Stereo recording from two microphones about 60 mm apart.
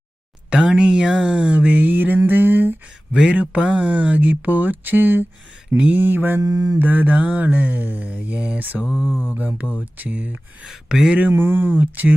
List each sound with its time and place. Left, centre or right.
0.8 s a sound: centre; by 2.7 s right
3.1 s speech: centre
3.5 s mantra: centre
5.7 s speech: centre
6.0 s speech: right
6.4 s mantra: right
6.7 s mantra: right
9.2 s mantra: right
10.8 s speech: centre
11.2 s speech: right